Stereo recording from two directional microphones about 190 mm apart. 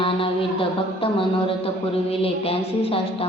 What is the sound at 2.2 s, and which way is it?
Speech, 30° left (ahead or behind).